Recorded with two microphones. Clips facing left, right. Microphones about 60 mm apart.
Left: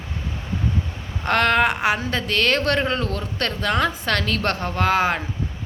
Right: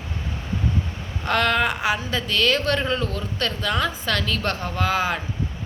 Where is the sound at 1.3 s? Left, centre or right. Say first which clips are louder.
Left 3 dB; left.